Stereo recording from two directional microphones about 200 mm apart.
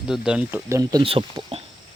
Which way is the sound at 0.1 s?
5° right (ahead or behind).